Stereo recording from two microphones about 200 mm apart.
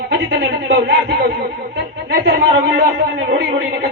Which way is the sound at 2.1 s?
50° right (ahead or behind).